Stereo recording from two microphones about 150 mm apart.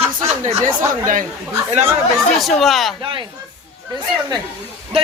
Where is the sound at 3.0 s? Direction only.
35° right (ahead or behind).